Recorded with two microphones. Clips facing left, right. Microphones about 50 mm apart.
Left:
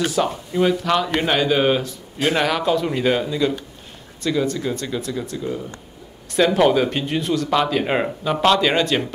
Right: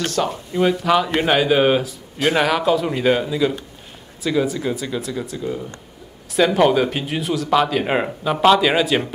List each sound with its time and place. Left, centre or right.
0.0 s speech: centre
0.5 s speech: centre